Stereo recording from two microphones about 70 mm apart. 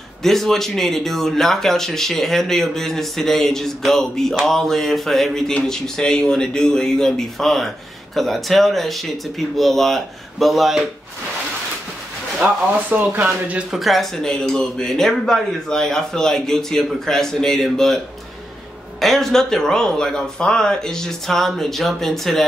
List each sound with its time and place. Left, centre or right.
0.2 s a man's voice: centre
12.4 s speech: right
13.7 s a man's voice: centre